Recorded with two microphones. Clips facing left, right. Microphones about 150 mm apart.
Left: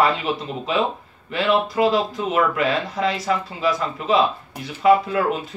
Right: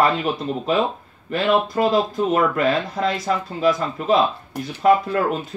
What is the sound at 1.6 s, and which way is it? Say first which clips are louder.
Speech: even; 45° right (ahead or behind).